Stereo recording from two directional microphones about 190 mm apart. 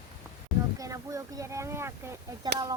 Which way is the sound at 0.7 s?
15° right (ahead or behind).